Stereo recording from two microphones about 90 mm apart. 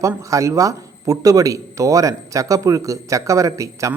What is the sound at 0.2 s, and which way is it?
Speech, 35° right (ahead or behind).